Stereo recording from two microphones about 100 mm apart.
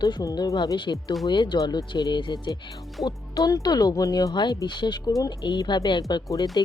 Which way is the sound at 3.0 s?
40° left (ahead or behind).